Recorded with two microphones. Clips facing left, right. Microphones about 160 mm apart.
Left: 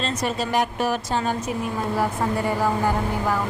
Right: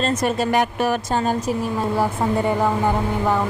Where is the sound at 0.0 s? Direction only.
50° right (ahead or behind).